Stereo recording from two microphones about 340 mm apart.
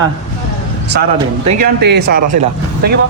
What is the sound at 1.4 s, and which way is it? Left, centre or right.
Speech, right.